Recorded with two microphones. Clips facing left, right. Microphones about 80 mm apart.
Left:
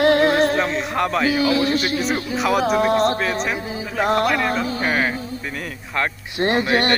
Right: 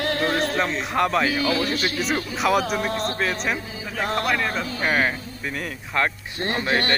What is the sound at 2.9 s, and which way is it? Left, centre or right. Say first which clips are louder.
Speech: left 9 dB; left.